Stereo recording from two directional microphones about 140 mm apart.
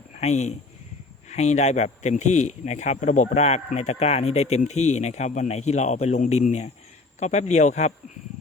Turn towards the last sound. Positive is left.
turn(degrees=55)  # may be behind; listen again after turning